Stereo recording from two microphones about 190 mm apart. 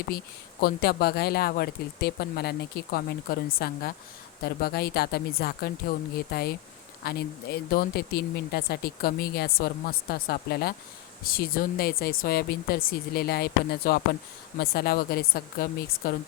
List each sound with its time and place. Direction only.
0.6 s speech: 55° left (ahead or behind)